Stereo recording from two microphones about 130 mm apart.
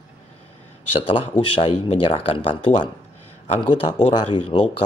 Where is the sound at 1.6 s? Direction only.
45° left (ahead or behind).